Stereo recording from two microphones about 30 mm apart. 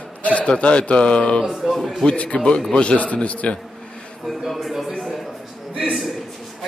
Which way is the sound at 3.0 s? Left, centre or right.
Left.